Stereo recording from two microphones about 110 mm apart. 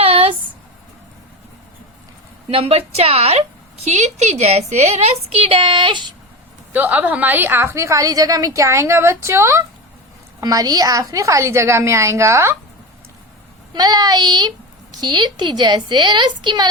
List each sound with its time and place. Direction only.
0.0 s a sound: 55° right (ahead or behind)
2.5 s speech: 60° right (ahead or behind)
3.8 s speech: 85° right; by 6.1 s 45° right (ahead or behind)
6.7 s a woman's voice: 15° right (ahead or behind)
10.4 s a woman's voice: 35° right (ahead or behind)
13.7 s a woman's voice: 35° right (ahead or behind)